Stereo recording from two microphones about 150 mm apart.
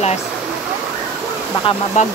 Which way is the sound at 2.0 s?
50° left (ahead or behind).